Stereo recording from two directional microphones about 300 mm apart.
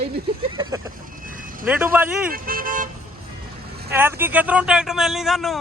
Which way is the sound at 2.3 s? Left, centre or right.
Right.